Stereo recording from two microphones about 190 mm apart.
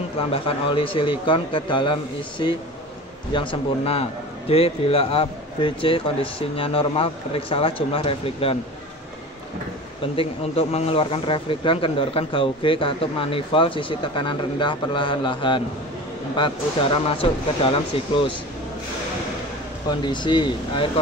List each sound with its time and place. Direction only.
0.3 s speech: 30° left (ahead or behind)
10.1 s speech: 30° left (ahead or behind)
19.9 s speech: 25° left (ahead or behind)